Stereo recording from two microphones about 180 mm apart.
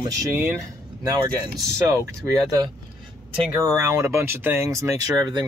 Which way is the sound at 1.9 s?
20° right (ahead or behind).